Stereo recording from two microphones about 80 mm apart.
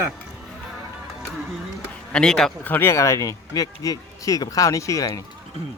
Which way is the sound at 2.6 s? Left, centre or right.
Left.